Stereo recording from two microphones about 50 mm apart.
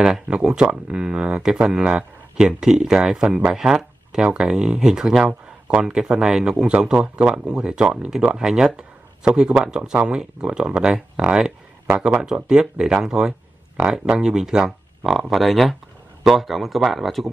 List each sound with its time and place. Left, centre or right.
0.0 s speech: centre